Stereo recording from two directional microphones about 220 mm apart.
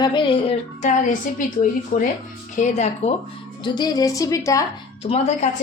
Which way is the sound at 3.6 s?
20° left (ahead or behind).